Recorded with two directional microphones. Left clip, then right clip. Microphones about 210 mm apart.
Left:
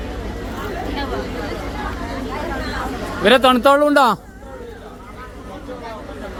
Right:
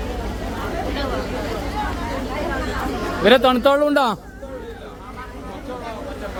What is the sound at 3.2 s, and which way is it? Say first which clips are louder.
Speech: left 2 dB; 15° left (ahead or behind).